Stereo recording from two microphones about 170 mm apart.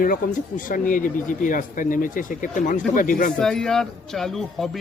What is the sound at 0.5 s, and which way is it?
Speech, 50° left (ahead or behind).